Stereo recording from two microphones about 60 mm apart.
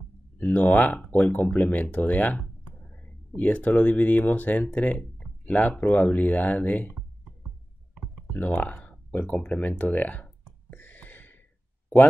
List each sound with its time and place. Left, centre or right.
0.4 s speech: left
5.2 s a sound: centre
5.6 s speech: left
8.4 s speech: left
10.7 s a sound: left
11.9 s speech: centre